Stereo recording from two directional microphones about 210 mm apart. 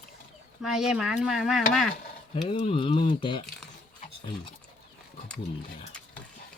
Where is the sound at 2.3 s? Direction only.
25° left (ahead or behind).